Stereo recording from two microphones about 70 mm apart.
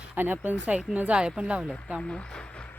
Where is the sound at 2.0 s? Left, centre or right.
Centre.